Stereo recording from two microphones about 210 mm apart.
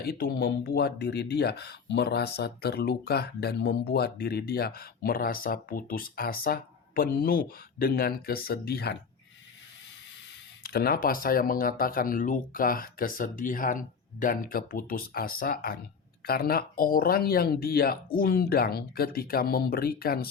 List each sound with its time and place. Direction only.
0.0 s speech: 45° left (ahead or behind)
10.6 s speech: 45° left (ahead or behind)